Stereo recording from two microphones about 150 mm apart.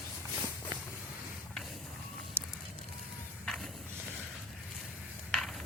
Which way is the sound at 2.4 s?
15° right (ahead or behind).